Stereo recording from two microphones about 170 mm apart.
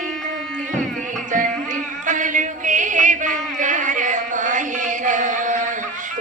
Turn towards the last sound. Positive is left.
turn(degrees=-50)  # may be behind; listen again after turning